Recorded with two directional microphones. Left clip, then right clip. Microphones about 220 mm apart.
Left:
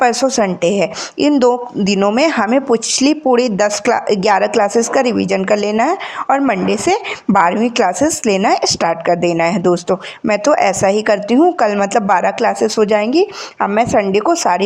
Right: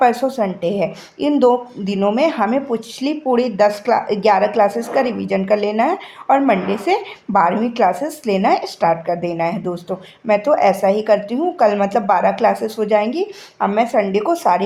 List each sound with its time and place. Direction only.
0.0 s a woman's voice: 25° left (ahead or behind)